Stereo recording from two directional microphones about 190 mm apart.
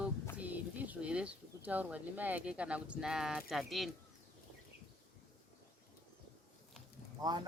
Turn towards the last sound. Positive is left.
turn(degrees=-20)  # may be behind; listen again after turning